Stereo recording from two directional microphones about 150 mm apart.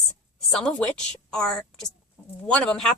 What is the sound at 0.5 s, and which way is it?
Speech, 5° left (ahead or behind).